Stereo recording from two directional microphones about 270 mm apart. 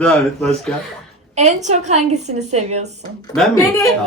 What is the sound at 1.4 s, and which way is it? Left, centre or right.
Speech, right.